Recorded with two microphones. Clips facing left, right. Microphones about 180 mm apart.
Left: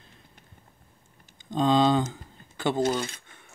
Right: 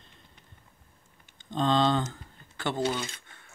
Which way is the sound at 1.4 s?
10° left (ahead or behind).